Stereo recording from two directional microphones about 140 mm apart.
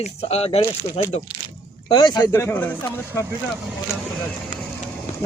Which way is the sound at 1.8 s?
30° left (ahead or behind).